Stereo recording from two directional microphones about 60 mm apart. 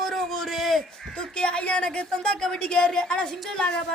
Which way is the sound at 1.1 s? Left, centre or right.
Centre.